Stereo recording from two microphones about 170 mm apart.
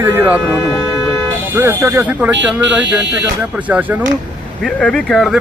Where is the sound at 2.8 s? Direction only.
90° right.